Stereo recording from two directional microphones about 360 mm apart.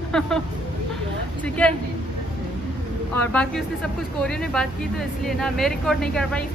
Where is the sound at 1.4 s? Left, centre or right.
Centre.